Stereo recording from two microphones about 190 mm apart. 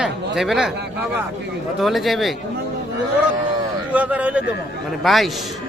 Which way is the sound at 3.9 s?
10° right (ahead or behind).